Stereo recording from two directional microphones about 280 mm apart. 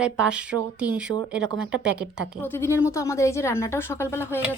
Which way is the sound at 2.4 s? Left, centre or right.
Centre.